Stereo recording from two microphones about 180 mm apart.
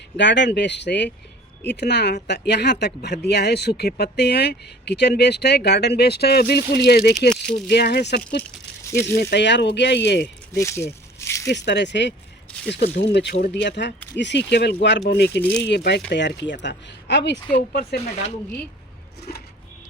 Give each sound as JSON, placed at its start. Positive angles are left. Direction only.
{"t": 0.2, "sound": "speech", "side_deg": 80}
{"t": 9.3, "sound": "speech", "side_deg": 75}
{"t": 10.5, "sound": "speech", "side_deg": 15}
{"t": 11.4, "sound": "speech", "side_deg": 70}
{"t": 15.4, "sound": "speech", "side_deg": 10}
{"t": 15.6, "sound": "speech", "side_deg": 70}
{"t": 17.5, "sound": "speech", "side_deg": 60}
{"t": 19.3, "sound": "speech", "side_deg": 55}